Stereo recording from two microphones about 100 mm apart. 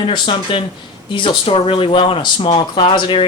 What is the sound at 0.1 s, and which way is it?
Speech, 60° left (ahead or behind).